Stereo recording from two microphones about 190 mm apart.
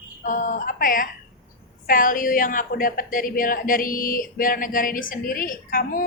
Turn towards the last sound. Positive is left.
turn(degrees=50)  # may be behind; listen again after turning